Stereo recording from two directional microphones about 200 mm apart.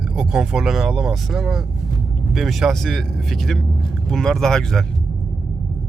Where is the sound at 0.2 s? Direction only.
5° right (ahead or behind).